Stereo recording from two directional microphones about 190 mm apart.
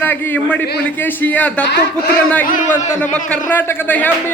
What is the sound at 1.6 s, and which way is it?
Speech, 65° left (ahead or behind).